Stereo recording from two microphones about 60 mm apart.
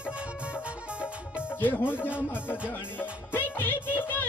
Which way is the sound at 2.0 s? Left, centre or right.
Right.